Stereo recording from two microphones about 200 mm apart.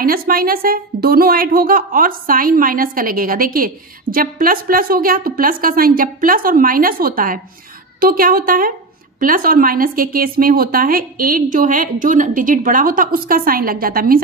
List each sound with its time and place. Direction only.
0.0 s a woman's voice: 45° right (ahead or behind)